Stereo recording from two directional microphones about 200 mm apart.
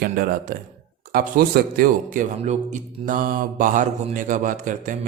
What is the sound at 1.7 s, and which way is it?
Mantra, 45° right (ahead or behind).